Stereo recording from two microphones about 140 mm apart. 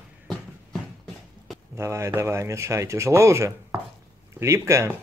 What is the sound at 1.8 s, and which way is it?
Speech, 20° right (ahead or behind).